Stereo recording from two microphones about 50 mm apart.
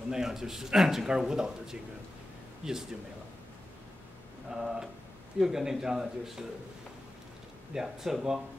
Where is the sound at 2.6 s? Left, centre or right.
Centre.